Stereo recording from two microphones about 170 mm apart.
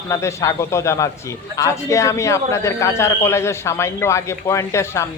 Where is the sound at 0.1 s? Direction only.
15° left (ahead or behind).